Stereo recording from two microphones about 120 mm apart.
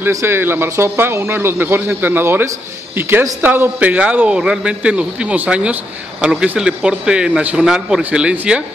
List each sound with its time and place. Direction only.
0.0 s a man's voice: 20° right (ahead or behind)